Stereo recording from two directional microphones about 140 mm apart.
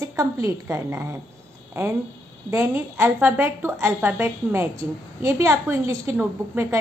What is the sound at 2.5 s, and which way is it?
A woman's voice, 15° right (ahead or behind).